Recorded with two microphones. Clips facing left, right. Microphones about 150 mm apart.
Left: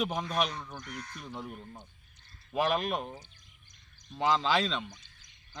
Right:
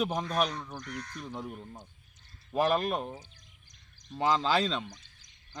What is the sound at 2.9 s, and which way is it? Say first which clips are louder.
Speech: right 1 dB; 5° right (ahead or behind).